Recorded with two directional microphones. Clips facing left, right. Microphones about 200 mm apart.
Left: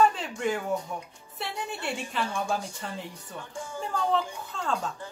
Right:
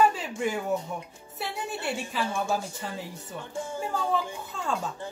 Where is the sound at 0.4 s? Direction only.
5° right (ahead or behind).